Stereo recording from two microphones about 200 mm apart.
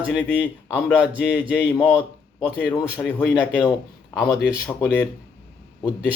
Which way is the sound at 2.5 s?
5° right (ahead or behind).